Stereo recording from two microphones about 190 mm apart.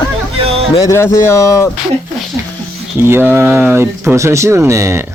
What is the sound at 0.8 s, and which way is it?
Speech, 15° left (ahead or behind).